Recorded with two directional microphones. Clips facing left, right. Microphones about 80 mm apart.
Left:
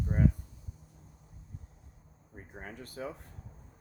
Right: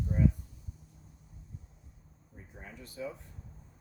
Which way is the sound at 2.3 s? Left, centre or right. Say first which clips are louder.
Left 4 dB; left.